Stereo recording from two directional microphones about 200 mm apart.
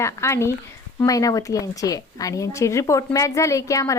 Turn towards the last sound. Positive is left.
turn(degrees=15)  # may be behind; listen again after turning